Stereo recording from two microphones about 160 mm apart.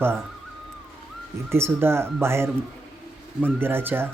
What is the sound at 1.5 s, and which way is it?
Speech, 15° right (ahead or behind).